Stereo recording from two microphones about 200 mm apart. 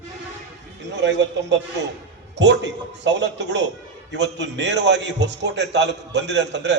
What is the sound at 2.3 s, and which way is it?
A man's voice, 60° right (ahead or behind).